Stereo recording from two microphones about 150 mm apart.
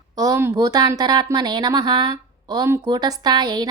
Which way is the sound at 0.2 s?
20° right (ahead or behind).